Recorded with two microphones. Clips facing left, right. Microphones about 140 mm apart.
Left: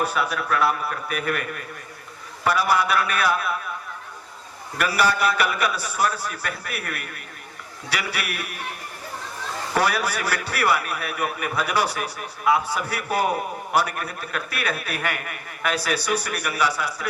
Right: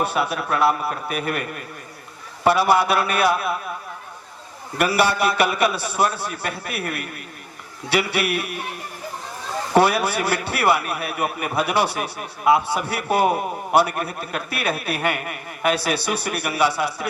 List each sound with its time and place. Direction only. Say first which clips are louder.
0.0 s a man's voice: right 2 dB; 30° right (ahead or behind)
4.8 s a man's voice: right 2 dB; 30° right (ahead or behind)
9.7 s a man's voice: right 6 dB; 25° right (ahead or behind)